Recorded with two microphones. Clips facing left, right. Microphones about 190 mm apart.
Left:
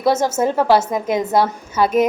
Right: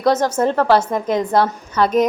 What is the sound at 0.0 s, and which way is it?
A woman's voice, 10° left (ahead or behind).